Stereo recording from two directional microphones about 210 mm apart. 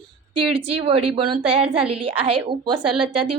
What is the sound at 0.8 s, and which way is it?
Speech, 30° right (ahead or behind).